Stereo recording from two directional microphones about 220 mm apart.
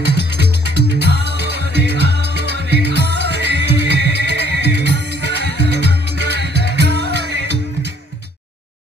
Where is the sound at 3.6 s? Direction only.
50° left (ahead or behind).